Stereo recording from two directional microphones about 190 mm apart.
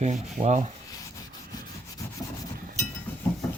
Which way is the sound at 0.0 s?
35° right (ahead or behind).